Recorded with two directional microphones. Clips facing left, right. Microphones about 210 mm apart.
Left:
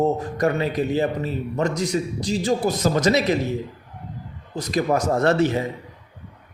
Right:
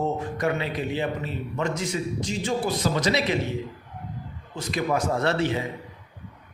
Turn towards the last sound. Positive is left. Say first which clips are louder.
# left 5 dB
turn(degrees=45)  # may be behind; listen again after turning